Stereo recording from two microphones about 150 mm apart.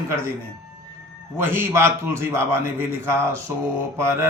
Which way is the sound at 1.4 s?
15° right (ahead or behind).